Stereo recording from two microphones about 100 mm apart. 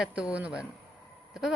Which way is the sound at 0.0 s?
10° right (ahead or behind).